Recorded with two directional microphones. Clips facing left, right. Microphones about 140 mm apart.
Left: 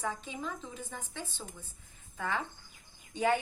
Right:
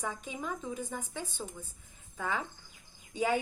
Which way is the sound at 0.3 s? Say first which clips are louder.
Right 3 dB; 10° right (ahead or behind).